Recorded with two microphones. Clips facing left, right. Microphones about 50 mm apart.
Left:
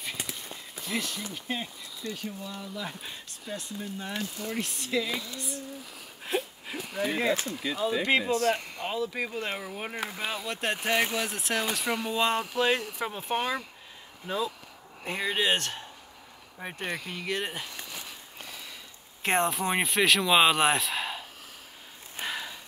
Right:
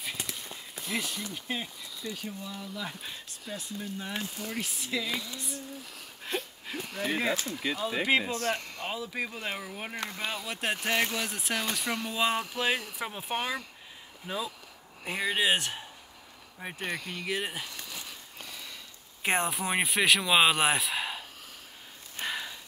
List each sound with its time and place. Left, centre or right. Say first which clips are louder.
0.2 s clip-clop: left 1 dB; centre
0.7 s speech: left 1 dB; centre
6.2 s a sound: left 4 dB; centre
7.6 s speech: right 1 dB; right
8.0 s speech: right 1 dB; centre
8.5 s speech: left 4 dB; centre
16.5 s speech: left 1 dB; centre
17.6 s a sound: left 1 dB; centre
19.2 s speech: left 3 dB; centre
22.2 s a sound: even; centre